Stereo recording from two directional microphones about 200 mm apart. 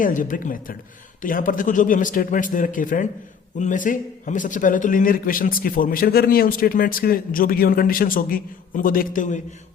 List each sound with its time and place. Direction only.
0.0 s a man's voice: 40° left (ahead or behind)